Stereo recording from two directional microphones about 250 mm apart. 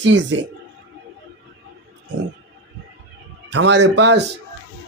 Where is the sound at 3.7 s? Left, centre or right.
Right.